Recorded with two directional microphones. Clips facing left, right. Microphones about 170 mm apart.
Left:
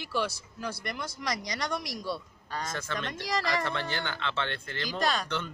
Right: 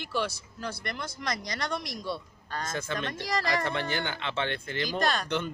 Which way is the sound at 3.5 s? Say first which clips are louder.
Right 2 dB; 15° right (ahead or behind).